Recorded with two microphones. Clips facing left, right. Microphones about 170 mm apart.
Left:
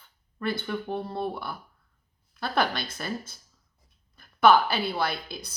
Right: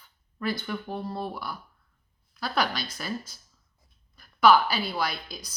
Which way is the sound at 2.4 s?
55° left (ahead or behind).